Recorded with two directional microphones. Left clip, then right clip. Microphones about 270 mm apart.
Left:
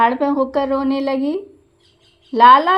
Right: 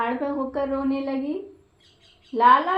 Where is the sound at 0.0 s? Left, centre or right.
Left.